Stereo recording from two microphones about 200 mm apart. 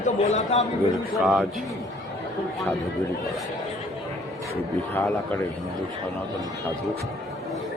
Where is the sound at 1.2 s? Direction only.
5° right (ahead or behind).